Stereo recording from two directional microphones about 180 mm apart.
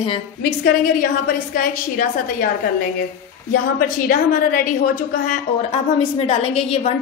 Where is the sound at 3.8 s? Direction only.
55° left (ahead or behind).